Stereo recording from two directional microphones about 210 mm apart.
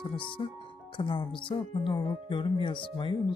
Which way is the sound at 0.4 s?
20° left (ahead or behind).